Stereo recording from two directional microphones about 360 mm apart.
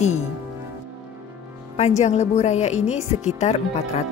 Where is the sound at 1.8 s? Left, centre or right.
Centre.